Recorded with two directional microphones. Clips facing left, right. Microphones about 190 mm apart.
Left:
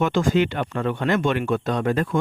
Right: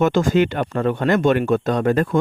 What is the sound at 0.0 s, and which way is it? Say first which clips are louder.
Speech: right 3 dB; 40° right (ahead or behind).